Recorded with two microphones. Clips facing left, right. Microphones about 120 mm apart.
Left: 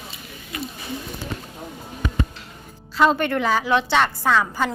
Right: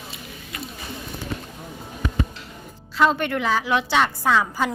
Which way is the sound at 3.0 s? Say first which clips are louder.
Left 2 dB; centre (ahead or behind).